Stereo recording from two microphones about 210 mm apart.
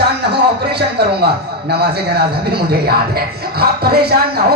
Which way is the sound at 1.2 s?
50° right (ahead or behind).